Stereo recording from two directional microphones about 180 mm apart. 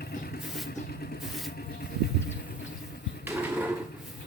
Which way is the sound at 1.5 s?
60° left (ahead or behind).